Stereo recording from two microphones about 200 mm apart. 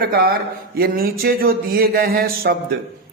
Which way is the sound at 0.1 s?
50° right (ahead or behind).